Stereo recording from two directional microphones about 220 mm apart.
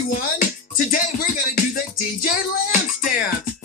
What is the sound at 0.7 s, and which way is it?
Music, 40° left (ahead or behind).